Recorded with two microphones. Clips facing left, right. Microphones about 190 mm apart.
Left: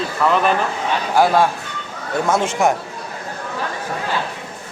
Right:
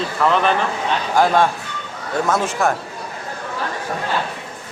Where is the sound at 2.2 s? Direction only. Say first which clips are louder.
Left 2 dB; 20° left (ahead or behind).